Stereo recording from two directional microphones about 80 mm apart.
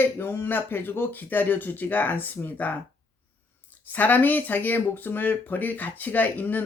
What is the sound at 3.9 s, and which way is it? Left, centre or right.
Speech, left.